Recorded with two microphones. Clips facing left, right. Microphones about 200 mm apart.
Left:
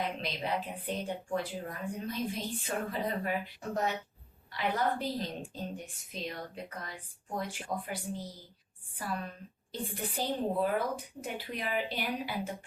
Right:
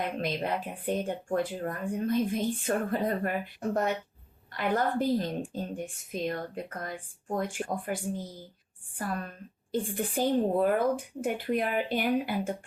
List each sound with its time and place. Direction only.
0.0 s speech: 50° right (ahead or behind)